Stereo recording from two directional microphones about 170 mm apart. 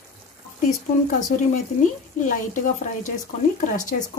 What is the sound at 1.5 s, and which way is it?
Speech, 50° left (ahead or behind).